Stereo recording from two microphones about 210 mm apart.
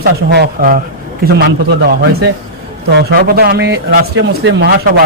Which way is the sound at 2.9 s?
50° right (ahead or behind).